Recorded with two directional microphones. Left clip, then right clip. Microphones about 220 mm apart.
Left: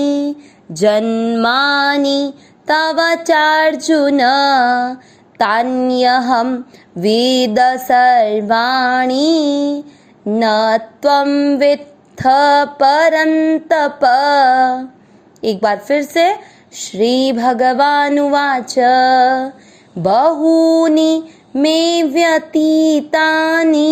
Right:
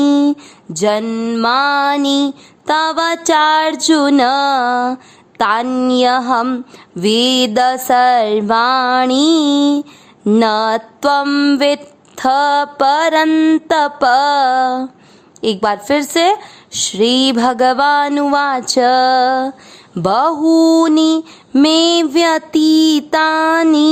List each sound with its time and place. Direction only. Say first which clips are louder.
0.0 s a sound: right 3 dB; 20° right (ahead or behind)
0.8 s a woman's voice: left 3 dB; 5° left (ahead or behind); by 5.6 s 10° right (ahead or behind)
5.6 s female singing: left 1 dB; 20° right (ahead or behind)
5.9 s a woman's voice: even; 10° right (ahead or behind)
6.4 s female singing: even; 20° right (ahead or behind)
7.0 s a woman's voice: even; 5° right (ahead or behind)
11.3 s female singing: left 1 dB; 25° right (ahead or behind)
11.7 s a woman's voice: left 2 dB; 15° right (ahead or behind)
13.2 s female singing: right 1 dB; 30° right (ahead or behind)
13.7 s a woman's voice: left 2 dB; 15° right (ahead or behind)